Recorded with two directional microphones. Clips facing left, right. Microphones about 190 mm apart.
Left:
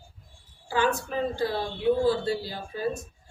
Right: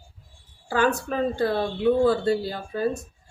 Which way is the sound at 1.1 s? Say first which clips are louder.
Right 4 dB; 60° right (ahead or behind).